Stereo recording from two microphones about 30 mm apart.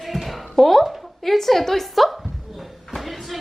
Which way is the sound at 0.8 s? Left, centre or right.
Centre.